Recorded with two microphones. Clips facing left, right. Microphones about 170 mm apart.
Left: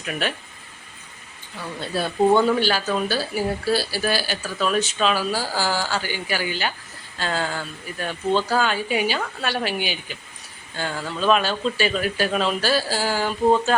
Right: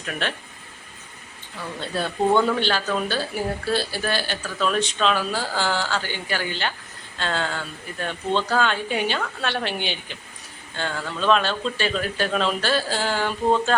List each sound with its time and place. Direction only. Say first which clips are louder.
0.0 s speech: left 2 dB; 5° left (ahead or behind)
1.8 s speech: left 3 dB; 5° left (ahead or behind)